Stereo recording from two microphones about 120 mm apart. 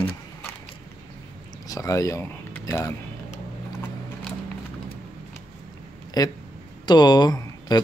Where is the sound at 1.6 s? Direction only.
30° left (ahead or behind).